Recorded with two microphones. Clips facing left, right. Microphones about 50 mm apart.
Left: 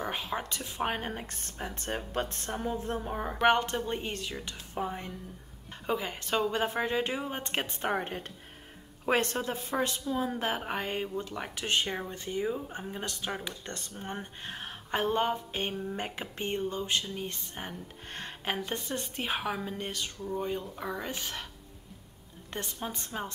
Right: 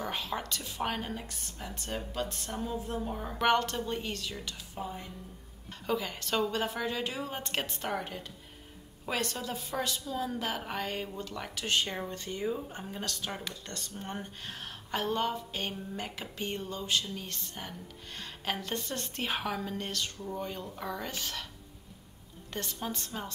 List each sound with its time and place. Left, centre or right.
0.0 s speech: left
1.0 s a woman's voice: left
3.4 s speech: left
4.7 s a woman's voice: left
5.9 s speech: left
18.4 s speech: centre
22.5 s speech: left